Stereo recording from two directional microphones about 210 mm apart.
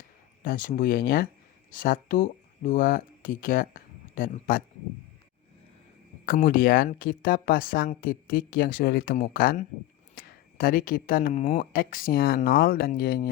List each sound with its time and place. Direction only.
0.4 s speech: 40° left (ahead or behind)
6.2 s speech: 40° left (ahead or behind)